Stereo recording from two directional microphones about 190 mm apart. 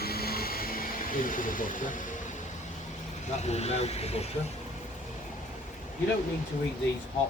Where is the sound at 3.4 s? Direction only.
35° left (ahead or behind).